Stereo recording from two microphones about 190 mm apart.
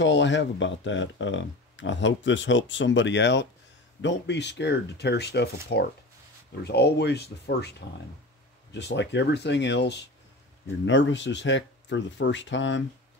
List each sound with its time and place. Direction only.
0.0 s speech: 70° left (ahead or behind)
8.7 s speech: 65° left (ahead or behind)